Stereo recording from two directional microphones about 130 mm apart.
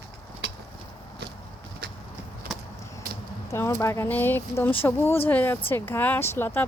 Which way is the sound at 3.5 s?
20° left (ahead or behind).